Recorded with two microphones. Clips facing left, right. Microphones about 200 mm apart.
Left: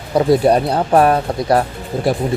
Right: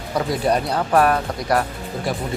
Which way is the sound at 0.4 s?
30° left (ahead or behind).